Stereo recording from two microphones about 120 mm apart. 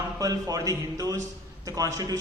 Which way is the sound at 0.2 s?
30° right (ahead or behind).